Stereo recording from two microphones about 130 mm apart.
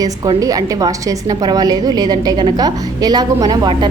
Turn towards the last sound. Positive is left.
turn(degrees=-35)  # may be behind; listen again after turning